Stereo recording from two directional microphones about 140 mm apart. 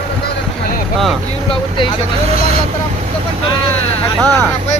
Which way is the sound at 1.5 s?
35° left (ahead or behind).